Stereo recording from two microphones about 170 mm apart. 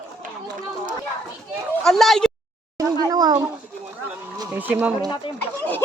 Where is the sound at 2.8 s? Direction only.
20° right (ahead or behind).